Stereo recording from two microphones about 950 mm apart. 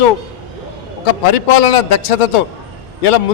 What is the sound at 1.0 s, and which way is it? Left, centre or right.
A man's voice, left.